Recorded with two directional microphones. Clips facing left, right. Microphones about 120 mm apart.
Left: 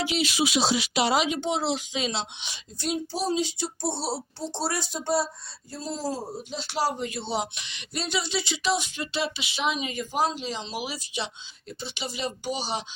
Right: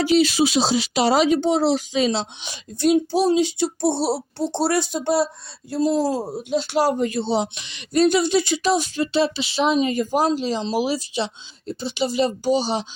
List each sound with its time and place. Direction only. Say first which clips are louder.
0.0 s speech: right 9 dB; 40° right (ahead or behind)
2.7 s speech: right 12 dB; 65° right (ahead or behind); by 12.8 s 30° right (ahead or behind)